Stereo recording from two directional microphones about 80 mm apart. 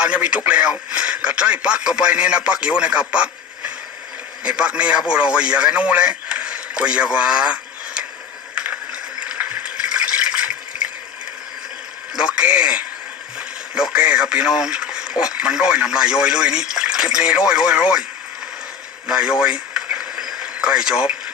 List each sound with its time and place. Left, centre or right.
0.0 s a man's voice: centre
8.5 s water: centre
12.1 s speech: centre
13.4 s radio: centre
13.9 s speech: centre
19.0 s a sound: centre